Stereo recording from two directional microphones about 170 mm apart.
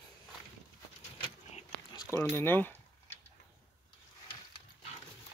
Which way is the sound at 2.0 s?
15° left (ahead or behind).